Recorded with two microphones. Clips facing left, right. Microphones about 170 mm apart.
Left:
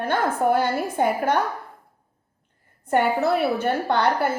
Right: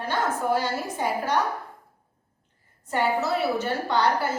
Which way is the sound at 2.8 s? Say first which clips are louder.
Left 4 dB; 55° left (ahead or behind).